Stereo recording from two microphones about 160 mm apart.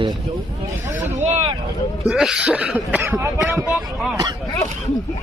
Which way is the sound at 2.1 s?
5° right (ahead or behind).